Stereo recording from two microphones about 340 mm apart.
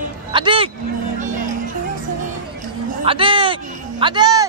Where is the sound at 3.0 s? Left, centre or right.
Centre.